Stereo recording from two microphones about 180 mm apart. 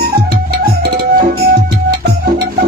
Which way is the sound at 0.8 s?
55° right (ahead or behind).